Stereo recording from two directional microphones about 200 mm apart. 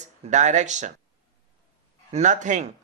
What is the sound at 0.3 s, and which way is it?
Speech, 35° right (ahead or behind).